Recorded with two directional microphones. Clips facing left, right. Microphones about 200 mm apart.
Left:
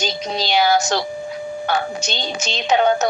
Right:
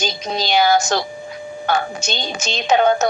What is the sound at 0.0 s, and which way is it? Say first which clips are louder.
A woman's voice: even; 50° right (ahead or behind).